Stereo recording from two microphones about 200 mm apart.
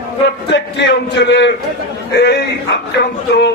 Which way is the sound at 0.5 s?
60° left (ahead or behind).